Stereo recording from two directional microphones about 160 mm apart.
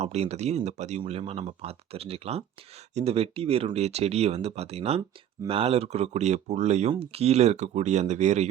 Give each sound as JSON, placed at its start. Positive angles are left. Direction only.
{"t": 0.0, "sound": "speech", "side_deg": -40}